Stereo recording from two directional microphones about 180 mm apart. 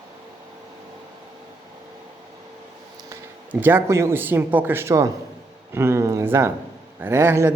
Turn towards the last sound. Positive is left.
turn(degrees=-10)  # may be behind; listen again after turning